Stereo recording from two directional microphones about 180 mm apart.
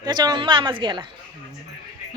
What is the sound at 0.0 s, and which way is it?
A woman's voice, 25° right (ahead or behind).